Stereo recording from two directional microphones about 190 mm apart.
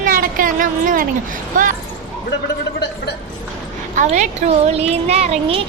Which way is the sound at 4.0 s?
40° right (ahead or behind).